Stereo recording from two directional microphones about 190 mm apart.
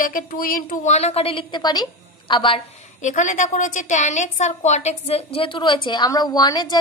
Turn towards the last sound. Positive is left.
turn(degrees=20)  # may be behind; listen again after turning